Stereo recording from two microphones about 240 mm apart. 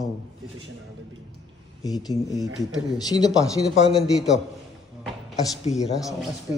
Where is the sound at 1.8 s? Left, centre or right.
Centre.